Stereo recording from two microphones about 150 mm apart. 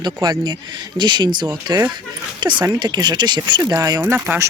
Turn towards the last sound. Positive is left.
turn(degrees=-15)  # may be behind; listen again after turning